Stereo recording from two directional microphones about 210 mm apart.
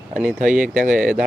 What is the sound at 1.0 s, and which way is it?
Speech, 5° right (ahead or behind).